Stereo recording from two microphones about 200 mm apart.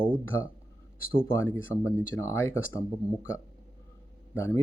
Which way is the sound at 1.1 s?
10° left (ahead or behind).